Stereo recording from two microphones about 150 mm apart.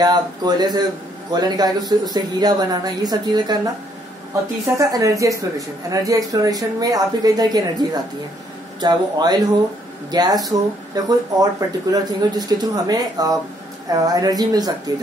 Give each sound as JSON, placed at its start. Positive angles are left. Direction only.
{"t": 0.0, "sound": "a woman's voice", "side_deg": -25}
{"t": 4.7, "sound": "a woman's voice", "side_deg": -20}